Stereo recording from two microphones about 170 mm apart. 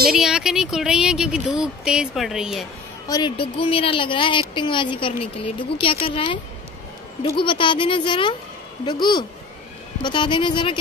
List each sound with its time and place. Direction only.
0.1 s speech: 5° right (ahead or behind)
3.1 s speech: 25° left (ahead or behind)